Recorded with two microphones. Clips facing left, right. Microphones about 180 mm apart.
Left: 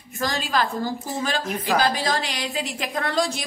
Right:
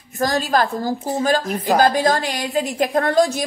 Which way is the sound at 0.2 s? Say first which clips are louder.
Right 6 dB; 45° right (ahead or behind).